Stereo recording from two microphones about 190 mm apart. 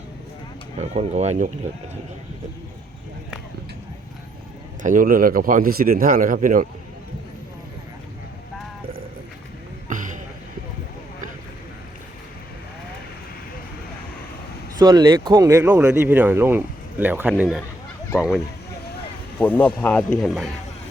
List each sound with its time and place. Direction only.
0.8 s speech: 35° right (ahead or behind)
4.8 s speech: 45° right (ahead or behind)
9.9 s a sound: 40° right (ahead or behind)
14.8 s speech: 20° right (ahead or behind); by 20.5 s centre (ahead or behind)